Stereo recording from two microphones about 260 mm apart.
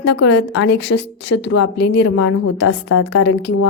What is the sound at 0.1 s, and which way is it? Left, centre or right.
A woman's voice, left.